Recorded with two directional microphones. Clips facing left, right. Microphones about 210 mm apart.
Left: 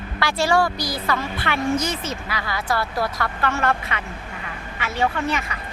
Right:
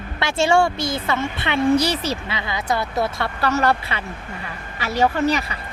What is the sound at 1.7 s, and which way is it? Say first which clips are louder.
Speech: right 5 dB; 35° right (ahead or behind).